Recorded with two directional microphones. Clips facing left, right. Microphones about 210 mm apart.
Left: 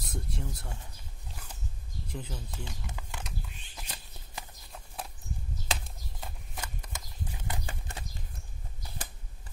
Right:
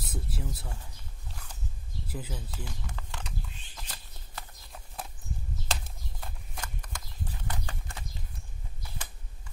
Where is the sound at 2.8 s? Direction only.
10° left (ahead or behind).